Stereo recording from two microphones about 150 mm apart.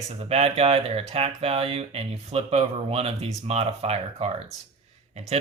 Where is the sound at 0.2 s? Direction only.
40° right (ahead or behind).